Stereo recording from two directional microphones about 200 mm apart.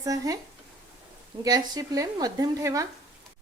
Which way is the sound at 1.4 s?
20° right (ahead or behind).